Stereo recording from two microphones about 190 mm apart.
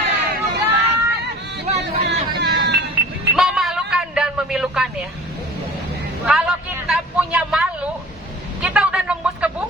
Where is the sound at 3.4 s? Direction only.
Centre (ahead or behind).